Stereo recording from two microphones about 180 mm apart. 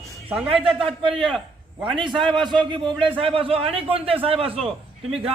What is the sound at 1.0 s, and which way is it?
A man's voice, 30° right (ahead or behind).